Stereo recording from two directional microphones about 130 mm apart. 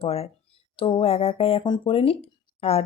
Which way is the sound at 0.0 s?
50° left (ahead or behind).